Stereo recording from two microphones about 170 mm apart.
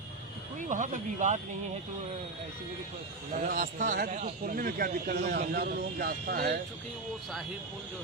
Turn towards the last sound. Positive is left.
turn(degrees=-60)  # may be behind; listen again after turning